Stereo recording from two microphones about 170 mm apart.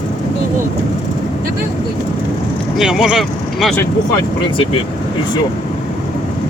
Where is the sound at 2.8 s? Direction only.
5° right (ahead or behind).